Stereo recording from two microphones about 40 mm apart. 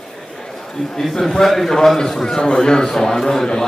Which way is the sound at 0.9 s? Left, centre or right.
Centre.